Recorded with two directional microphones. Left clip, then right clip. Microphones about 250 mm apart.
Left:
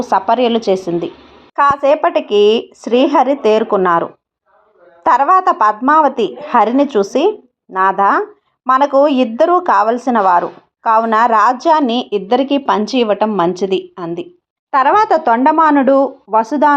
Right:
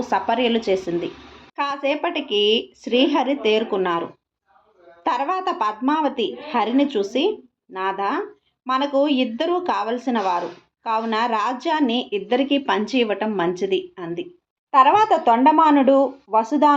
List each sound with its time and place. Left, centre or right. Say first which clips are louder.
0.0 s a woman's voice: left 8 dB; left
5.0 s a woman's voice: left 12 dB; left